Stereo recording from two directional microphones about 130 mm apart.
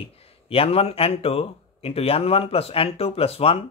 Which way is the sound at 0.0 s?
50° left (ahead or behind).